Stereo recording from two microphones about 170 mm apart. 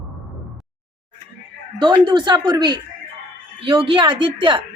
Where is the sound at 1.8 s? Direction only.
25° right (ahead or behind).